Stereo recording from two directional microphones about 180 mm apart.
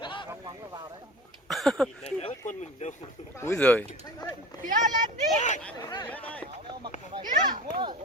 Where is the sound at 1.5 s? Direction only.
Centre (ahead or behind).